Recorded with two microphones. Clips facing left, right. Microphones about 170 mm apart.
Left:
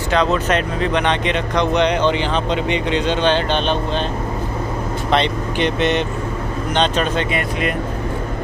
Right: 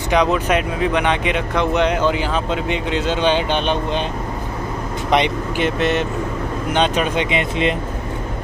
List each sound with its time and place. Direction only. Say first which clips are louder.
0.1 s speech: right 1 dB; 15° right (ahead or behind)
5.1 s speech: right 1 dB; 10° right (ahead or behind)
5.8 s speech: even; centre (ahead or behind); by 7.7 s 20° right (ahead or behind)